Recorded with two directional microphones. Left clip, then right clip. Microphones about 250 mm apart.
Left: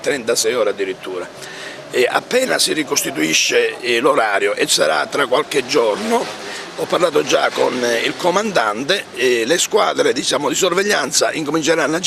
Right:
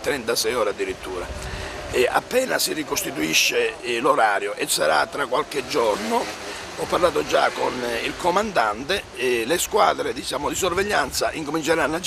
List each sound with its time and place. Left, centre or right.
0.0 s speech: centre
1.9 s speech: left